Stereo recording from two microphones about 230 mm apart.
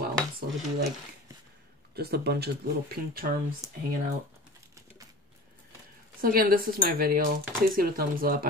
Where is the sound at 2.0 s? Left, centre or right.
Right.